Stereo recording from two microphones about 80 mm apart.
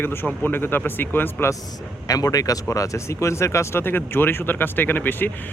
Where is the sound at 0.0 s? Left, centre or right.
Left.